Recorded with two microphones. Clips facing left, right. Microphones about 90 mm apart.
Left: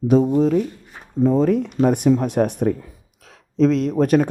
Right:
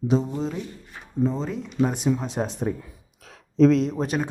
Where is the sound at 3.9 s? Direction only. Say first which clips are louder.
Left 10 dB; 55° left (ahead or behind).